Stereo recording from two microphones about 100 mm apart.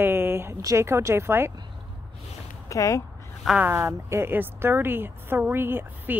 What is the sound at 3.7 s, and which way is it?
Speech, 30° right (ahead or behind).